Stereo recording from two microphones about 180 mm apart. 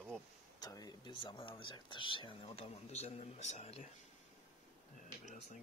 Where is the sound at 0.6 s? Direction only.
20° left (ahead or behind); by 3.8 s 35° left (ahead or behind).